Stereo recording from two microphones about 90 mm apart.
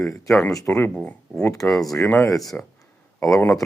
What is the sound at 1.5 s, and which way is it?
Speech, 35° left (ahead or behind).